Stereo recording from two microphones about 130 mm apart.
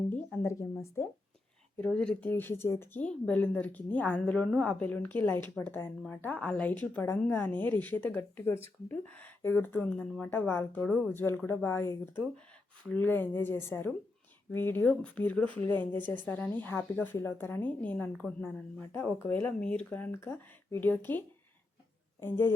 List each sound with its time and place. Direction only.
0.4 s speech: 20° left (ahead or behind)
1.8 s speech: 5° left (ahead or behind)
10.8 s speech: 5° left (ahead or behind)
11.1 s speech: 15° left (ahead or behind)